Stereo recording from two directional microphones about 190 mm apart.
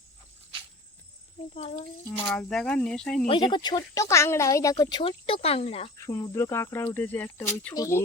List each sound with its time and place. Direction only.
1.5 s a child's voice: 35° left (ahead or behind)
2.3 s speech: 5° left (ahead or behind)
3.2 s speech: 25° left (ahead or behind)
6.0 s cricket: 15° left (ahead or behind)